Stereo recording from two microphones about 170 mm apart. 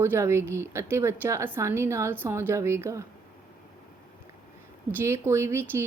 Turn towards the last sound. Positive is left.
turn(degrees=-15)  # may be behind; listen again after turning